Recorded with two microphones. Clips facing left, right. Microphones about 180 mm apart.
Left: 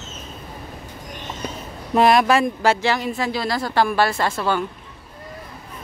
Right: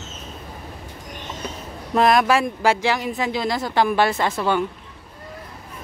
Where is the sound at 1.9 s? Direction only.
Centre (ahead or behind); by 4.6 s 15° right (ahead or behind).